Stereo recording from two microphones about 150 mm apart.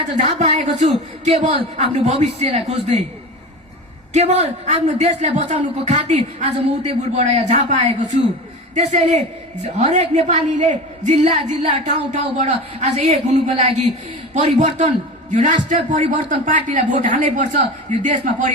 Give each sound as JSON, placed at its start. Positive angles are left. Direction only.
{"t": 0.1, "sound": "a woman's voice", "side_deg": -50}
{"t": 4.1, "sound": "a woman's voice", "side_deg": -50}
{"t": 8.7, "sound": "a woman's voice", "side_deg": -45}